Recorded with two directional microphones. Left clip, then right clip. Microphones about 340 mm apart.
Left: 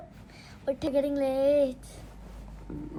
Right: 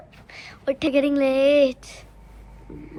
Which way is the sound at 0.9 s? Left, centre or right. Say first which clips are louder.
Right 7 dB; right.